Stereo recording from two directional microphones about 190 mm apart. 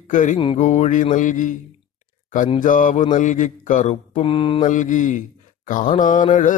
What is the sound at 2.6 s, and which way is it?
Speech, 45° left (ahead or behind).